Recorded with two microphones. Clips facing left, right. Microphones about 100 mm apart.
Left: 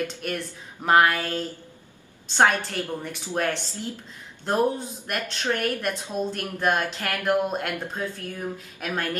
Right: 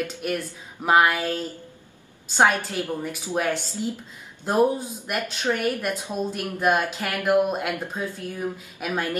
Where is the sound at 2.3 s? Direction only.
10° right (ahead or behind).